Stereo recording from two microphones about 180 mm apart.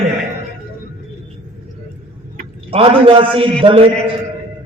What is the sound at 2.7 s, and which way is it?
Speech, 30° right (ahead or behind).